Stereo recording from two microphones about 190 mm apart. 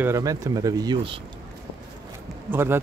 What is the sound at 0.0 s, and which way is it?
Speech, 15° right (ahead or behind).